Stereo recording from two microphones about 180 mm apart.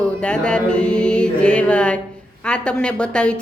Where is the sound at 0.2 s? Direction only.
5° left (ahead or behind).